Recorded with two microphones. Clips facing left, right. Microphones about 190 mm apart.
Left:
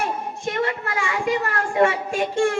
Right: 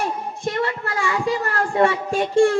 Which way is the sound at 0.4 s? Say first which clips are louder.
Right 1 dB; 35° right (ahead or behind).